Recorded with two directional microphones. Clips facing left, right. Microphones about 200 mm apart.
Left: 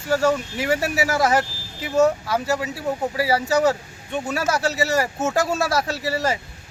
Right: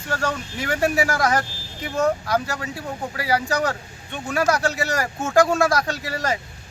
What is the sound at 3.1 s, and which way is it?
Speech, 30° left (ahead or behind).